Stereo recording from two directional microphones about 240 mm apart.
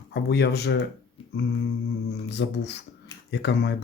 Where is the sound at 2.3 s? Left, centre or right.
Left.